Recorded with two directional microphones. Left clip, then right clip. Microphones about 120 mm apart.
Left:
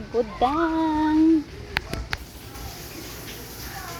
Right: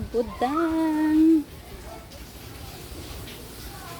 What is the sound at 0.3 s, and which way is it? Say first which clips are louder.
Speech: left 3 dB; 25° right (ahead or behind).